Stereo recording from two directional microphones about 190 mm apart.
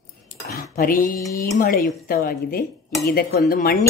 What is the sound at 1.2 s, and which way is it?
Speech, 15° left (ahead or behind).